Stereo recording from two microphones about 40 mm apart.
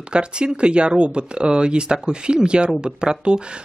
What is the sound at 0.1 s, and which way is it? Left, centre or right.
Speech, right.